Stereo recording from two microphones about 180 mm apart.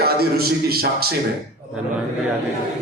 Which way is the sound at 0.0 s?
60° right (ahead or behind).